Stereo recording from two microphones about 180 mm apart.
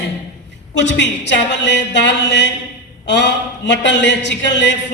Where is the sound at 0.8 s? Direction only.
75° left (ahead or behind).